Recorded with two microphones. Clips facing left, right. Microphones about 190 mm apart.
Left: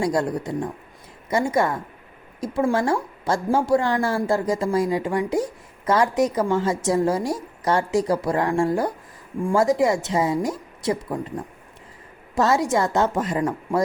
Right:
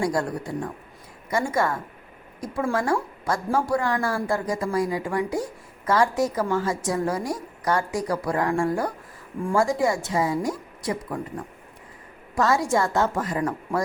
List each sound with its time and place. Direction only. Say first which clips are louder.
0.0 s a woman's voice: left 3 dB; 20° left (ahead or behind)
12.3 s a woman's voice: left 2 dB; 25° left (ahead or behind)